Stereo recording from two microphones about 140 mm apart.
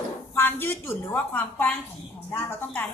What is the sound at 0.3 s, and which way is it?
A woman's voice, 15° left (ahead or behind).